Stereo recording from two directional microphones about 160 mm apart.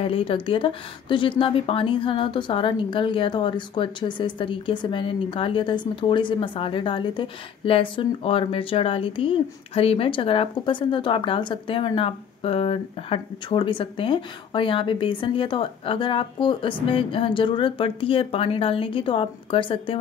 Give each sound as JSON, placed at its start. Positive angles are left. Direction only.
{"t": 0.0, "sound": "speech", "side_deg": 35}